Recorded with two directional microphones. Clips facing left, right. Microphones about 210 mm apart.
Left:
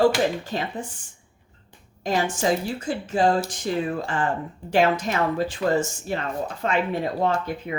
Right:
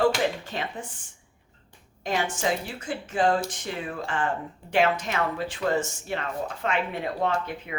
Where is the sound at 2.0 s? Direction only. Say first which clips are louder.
Left 4 dB; 40° left (ahead or behind).